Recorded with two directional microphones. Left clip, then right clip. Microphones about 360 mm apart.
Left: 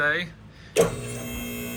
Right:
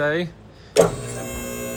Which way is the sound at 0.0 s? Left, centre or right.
Centre.